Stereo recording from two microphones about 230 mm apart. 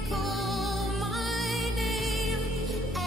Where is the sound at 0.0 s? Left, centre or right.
Centre.